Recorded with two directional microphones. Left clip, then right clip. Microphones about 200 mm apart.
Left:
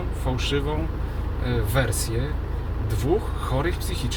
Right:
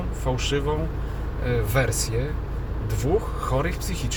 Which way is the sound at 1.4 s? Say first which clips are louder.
Right 1 dB; 10° right (ahead or behind).